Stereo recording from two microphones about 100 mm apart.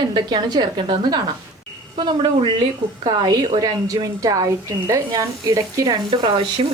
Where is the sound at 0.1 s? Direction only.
50° right (ahead or behind).